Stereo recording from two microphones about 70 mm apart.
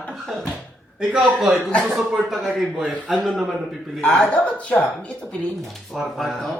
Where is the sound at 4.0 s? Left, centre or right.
Centre.